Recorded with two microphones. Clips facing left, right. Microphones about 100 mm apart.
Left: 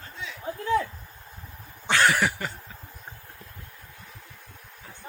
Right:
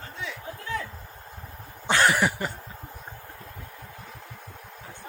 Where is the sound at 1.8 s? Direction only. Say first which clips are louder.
Right 1 dB; 25° right (ahead or behind).